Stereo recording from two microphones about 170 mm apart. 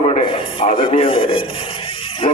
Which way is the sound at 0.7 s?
30° left (ahead or behind).